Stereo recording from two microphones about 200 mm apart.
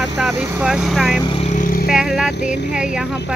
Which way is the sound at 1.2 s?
30° left (ahead or behind).